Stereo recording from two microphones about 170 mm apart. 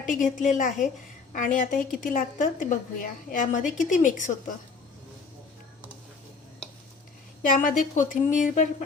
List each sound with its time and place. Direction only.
0.0 s a woman's voice: 50° left (ahead or behind)
7.4 s a woman's voice: 50° left (ahead or behind)